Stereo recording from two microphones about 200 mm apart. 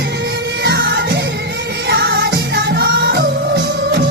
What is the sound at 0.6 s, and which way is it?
Music, 55° right (ahead or behind).